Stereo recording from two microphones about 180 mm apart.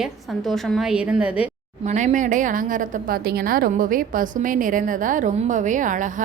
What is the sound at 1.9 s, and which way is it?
A woman's voice, 40° right (ahead or behind).